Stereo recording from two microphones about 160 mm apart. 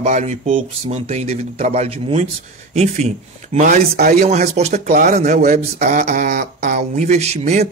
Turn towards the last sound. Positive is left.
turn(degrees=-45)  # may be behind; listen again after turning